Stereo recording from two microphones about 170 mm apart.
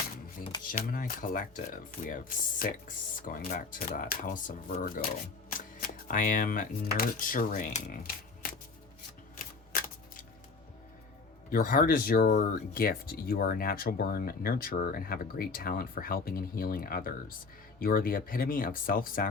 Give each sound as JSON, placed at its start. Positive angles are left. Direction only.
{"t": 0.7, "sound": "speech", "side_deg": 55}
{"t": 9.7, "sound": "shuffling cards", "side_deg": 55}
{"t": 11.5, "sound": "speech", "side_deg": 55}